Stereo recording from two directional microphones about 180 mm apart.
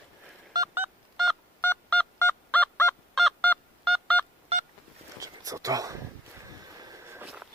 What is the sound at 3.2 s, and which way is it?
Honk, 5° left (ahead or behind).